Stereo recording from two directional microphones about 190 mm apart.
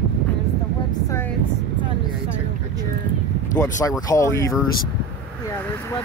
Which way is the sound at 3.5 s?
20° left (ahead or behind).